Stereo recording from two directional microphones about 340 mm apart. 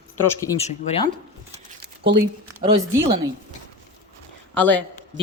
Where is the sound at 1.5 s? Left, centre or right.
Right.